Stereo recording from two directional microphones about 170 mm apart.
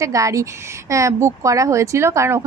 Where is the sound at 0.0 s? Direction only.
20° right (ahead or behind).